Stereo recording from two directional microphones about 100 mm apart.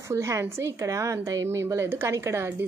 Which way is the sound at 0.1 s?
30° right (ahead or behind).